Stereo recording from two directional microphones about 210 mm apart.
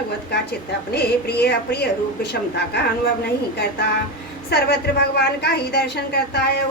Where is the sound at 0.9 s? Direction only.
50° left (ahead or behind).